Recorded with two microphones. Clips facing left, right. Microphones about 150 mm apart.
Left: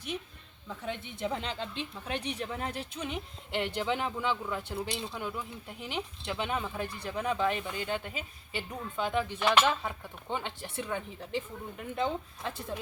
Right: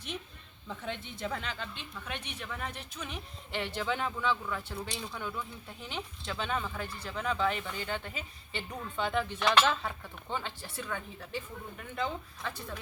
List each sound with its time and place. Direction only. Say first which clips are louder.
0.7 s speech: left 1 dB; 5° left (ahead or behind)
1.0 s speech: left 3 dB; 20° left (ahead or behind)